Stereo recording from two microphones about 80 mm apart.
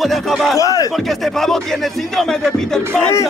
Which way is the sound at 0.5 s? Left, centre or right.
Left.